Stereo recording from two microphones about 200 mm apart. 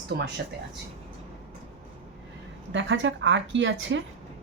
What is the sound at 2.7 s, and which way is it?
A woman's voice, 65° right (ahead or behind).